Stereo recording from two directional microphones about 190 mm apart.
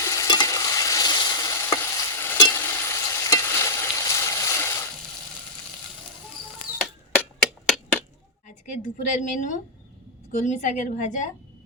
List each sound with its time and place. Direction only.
0.0 s stir: 15° left (ahead or behind)
7.7 s a sound: 5° left (ahead or behind)
8.4 s a woman's voice: 45° left (ahead or behind)